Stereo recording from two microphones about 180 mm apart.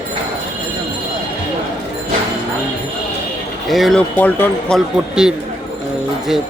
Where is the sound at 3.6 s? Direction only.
Centre (ahead or behind).